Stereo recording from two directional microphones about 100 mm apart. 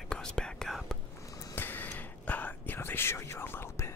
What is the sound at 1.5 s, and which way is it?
Whispering, 20° left (ahead or behind).